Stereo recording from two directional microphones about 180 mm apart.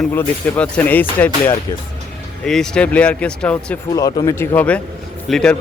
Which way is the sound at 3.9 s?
20° left (ahead or behind).